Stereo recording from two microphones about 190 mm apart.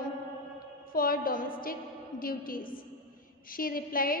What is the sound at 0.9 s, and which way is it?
A woman's voice, 50° left (ahead or behind).